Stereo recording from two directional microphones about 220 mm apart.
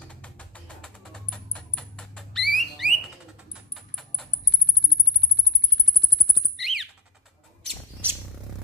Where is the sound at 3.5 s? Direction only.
Centre (ahead or behind).